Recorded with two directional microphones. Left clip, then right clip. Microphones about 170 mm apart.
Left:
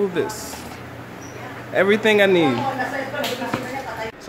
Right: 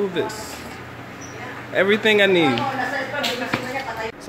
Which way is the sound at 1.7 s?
5° left (ahead or behind).